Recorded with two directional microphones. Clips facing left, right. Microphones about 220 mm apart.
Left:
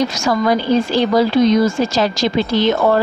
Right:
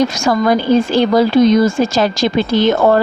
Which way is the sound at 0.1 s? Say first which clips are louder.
Right 2 dB; 50° right (ahead or behind).